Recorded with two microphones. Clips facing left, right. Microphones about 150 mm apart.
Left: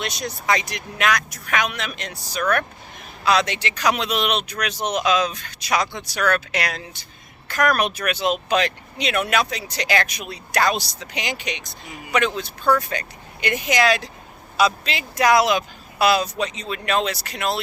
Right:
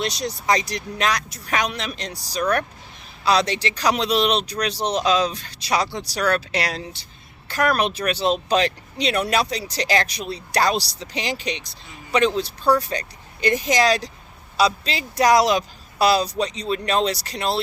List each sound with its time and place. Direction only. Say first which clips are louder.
0.0 s speech: right 2 dB; 35° right (ahead or behind)